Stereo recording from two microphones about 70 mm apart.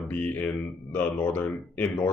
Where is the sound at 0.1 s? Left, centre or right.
Left.